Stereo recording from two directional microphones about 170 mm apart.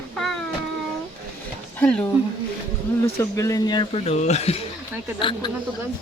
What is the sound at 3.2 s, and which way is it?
A man's voice, 20° left (ahead or behind).